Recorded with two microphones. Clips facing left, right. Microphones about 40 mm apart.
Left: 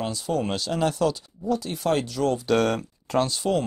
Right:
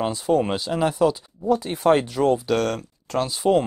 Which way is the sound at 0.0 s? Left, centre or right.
Right.